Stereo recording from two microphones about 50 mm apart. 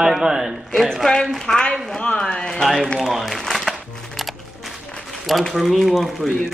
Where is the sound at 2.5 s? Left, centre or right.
Centre.